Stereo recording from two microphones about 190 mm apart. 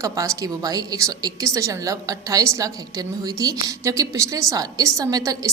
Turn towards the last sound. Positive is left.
turn(degrees=-20)  # may be behind; listen again after turning